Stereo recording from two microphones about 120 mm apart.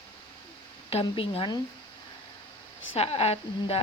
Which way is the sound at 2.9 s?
60° left (ahead or behind).